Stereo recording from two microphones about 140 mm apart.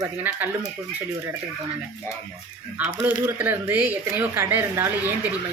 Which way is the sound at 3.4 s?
15° right (ahead or behind).